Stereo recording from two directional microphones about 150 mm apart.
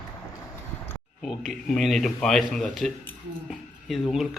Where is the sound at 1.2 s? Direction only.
Centre (ahead or behind).